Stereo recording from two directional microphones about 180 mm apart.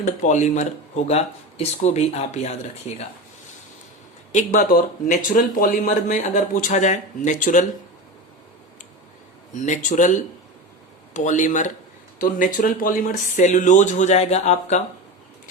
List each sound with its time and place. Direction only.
0.0 s speech: 40° left (ahead or behind)
4.3 s speech: 45° left (ahead or behind)
9.6 s speech: 45° left (ahead or behind)